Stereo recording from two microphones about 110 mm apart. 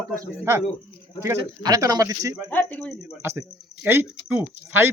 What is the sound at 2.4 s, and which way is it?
Speech, 15° left (ahead or behind).